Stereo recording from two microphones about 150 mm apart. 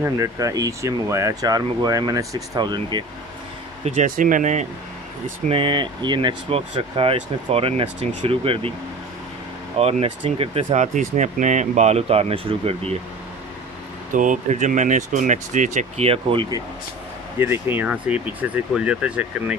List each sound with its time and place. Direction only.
0.0 s speech: 20° right (ahead or behind)
3.8 s speech: 55° right (ahead or behind)
5.5 s speech: 35° right (ahead or behind)
9.8 s speech: 40° right (ahead or behind)
14.1 s speech: 60° right (ahead or behind); by 16.6 s 30° right (ahead or behind)
17.4 s speech: 15° right (ahead or behind)